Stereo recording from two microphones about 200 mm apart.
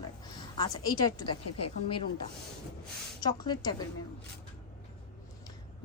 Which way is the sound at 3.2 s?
20° left (ahead or behind).